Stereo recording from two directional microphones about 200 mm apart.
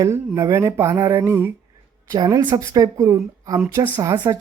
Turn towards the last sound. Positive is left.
turn(degrees=-15)  # may be behind; listen again after turning